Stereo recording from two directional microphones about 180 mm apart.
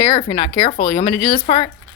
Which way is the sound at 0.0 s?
30° left (ahead or behind).